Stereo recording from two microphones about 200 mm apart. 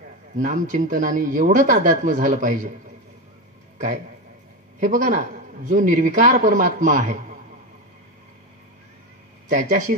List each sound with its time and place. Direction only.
0.4 s a man's voice: 40° right (ahead or behind)
3.7 s a man's voice: 40° right (ahead or behind)
9.5 s a man's voice: 40° right (ahead or behind)